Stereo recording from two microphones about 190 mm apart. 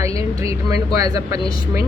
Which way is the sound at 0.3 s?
15° right (ahead or behind).